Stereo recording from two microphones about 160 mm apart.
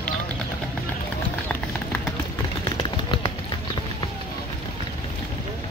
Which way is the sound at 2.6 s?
30° left (ahead or behind).